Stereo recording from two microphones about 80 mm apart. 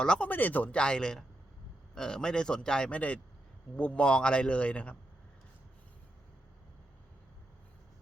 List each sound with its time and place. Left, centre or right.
0.0 s a man's voice: centre
0.3 s a man's voice: left